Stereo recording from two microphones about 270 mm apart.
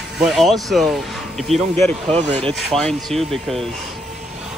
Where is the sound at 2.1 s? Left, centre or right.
Right.